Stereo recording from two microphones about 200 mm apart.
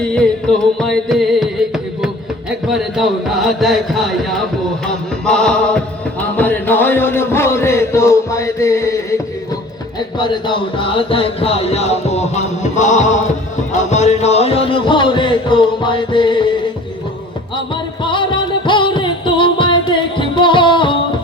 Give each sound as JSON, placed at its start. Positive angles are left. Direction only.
{"t": 0.8, "sound": "music", "side_deg": 0}
{"t": 2.6, "sound": "speech", "side_deg": 0}
{"t": 10.2, "sound": "music", "side_deg": 25}
{"t": 18.0, "sound": "music", "side_deg": 25}